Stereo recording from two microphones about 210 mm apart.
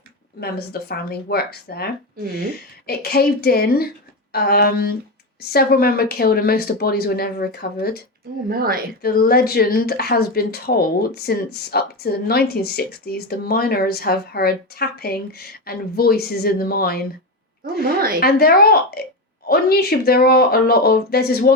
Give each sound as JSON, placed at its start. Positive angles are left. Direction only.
{"t": 0.3, "sound": "speech", "side_deg": 50}
{"t": 8.4, "sound": "speech", "side_deg": -45}
{"t": 9.0, "sound": "speech", "side_deg": 45}
{"t": 17.8, "sound": "speech", "side_deg": -45}
{"t": 18.2, "sound": "speech", "side_deg": 45}